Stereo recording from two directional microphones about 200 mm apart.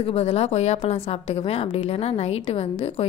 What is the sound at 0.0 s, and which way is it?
A woman's voice, 30° left (ahead or behind).